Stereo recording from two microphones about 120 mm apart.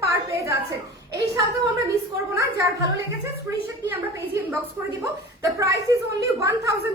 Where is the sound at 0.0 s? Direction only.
25° right (ahead or behind).